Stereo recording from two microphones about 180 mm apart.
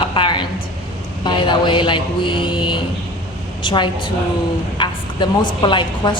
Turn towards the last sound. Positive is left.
turn(degrees=25)  # may be behind; listen again after turning